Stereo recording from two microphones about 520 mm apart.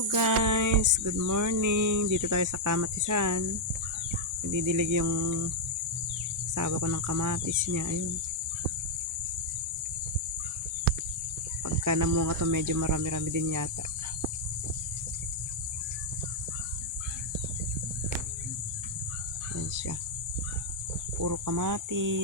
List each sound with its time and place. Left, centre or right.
0.1 s cricket: right
4.5 s cricket: right
6.5 s cricket: right
11.6 s cricket: right
21.2 s cricket: right